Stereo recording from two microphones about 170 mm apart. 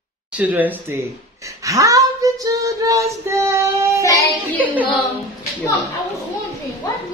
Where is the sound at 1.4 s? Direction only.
20° right (ahead or behind).